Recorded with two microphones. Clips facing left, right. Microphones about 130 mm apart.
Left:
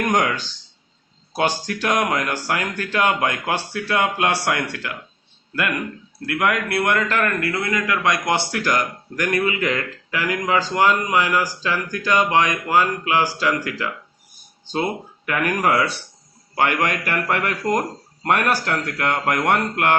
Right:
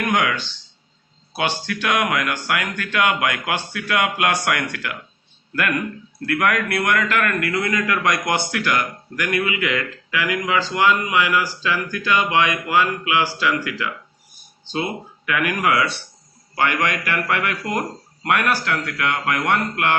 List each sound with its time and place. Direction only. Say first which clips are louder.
0.1 s a man's voice: left 1 dB; 40° left (ahead or behind)
6.2 s a man's voice: right 1 dB; 20° left (ahead or behind)
8.5 s speech: even; 40° left (ahead or behind)
15.3 s a man's voice: left 1 dB; 40° left (ahead or behind)